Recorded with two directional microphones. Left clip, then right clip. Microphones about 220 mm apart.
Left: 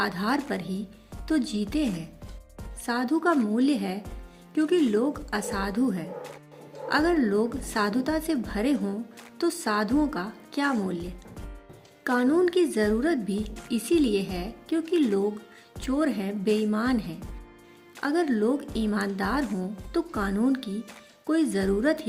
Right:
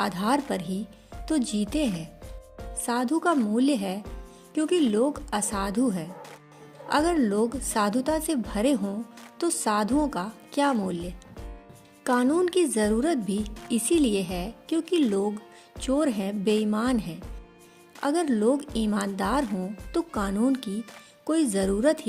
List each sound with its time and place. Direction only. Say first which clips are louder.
0.0 s a woman's voice: right 1 dB; 45° right (ahead or behind)